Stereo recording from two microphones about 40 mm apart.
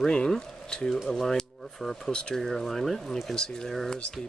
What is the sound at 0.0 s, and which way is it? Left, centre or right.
Speech, centre.